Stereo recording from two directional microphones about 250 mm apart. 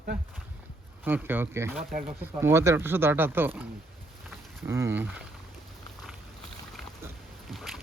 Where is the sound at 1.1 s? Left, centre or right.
Centre.